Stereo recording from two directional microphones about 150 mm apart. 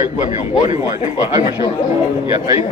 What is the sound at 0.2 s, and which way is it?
Speech, 55° left (ahead or behind).